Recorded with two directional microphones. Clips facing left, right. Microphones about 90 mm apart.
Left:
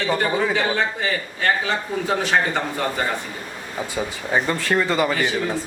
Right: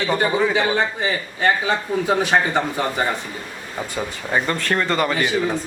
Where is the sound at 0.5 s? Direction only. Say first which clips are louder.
Right 2 dB; 15° right (ahead or behind).